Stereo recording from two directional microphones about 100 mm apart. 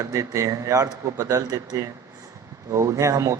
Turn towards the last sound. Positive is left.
turn(degrees=-30)  # may be behind; listen again after turning